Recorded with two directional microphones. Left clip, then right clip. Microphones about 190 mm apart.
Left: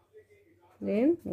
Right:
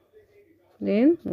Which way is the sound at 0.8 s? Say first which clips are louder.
Right 6 dB; 25° right (ahead or behind).